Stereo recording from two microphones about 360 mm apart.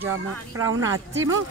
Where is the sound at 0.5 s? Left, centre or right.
Right.